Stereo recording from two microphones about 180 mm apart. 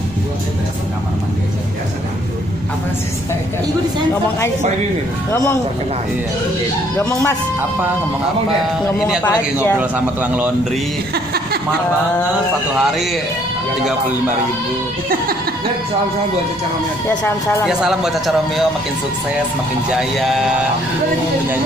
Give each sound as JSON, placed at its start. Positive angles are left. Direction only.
{"t": 5.3, "sound": "speech", "side_deg": 15}
{"t": 7.0, "sound": "speech", "side_deg": 15}
{"t": 8.9, "sound": "a man's voice", "side_deg": 0}
{"t": 9.2, "sound": "speech", "side_deg": 10}
{"t": 9.8, "sound": "a man's voice", "side_deg": -10}
{"t": 12.7, "sound": "a man's voice", "side_deg": 0}
{"t": 17.6, "sound": "a man's voice", "side_deg": -5}
{"t": 19.9, "sound": "a man's voice", "side_deg": 0}